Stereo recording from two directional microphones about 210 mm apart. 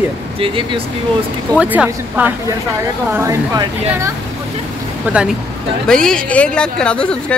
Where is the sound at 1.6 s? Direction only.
5° right (ahead or behind).